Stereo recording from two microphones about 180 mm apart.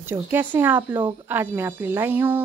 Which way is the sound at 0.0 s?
10° right (ahead or behind).